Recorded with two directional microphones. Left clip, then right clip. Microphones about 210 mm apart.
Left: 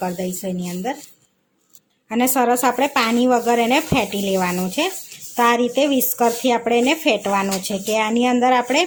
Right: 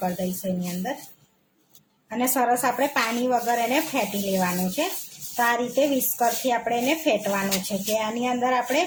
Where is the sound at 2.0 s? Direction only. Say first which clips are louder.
Left 5 dB; 35° left (ahead or behind).